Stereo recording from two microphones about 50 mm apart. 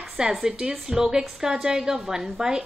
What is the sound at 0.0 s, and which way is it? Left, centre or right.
A woman's voice, centre.